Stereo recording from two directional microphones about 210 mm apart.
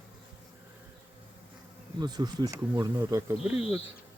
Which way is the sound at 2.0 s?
20° right (ahead or behind).